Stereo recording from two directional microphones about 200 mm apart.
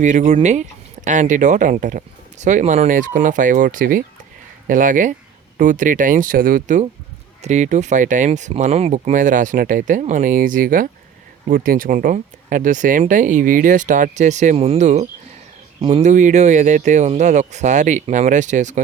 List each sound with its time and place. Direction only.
0.0 s speech: 35° right (ahead or behind)